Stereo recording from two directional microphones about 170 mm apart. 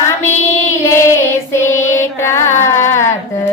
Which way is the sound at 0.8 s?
15° left (ahead or behind).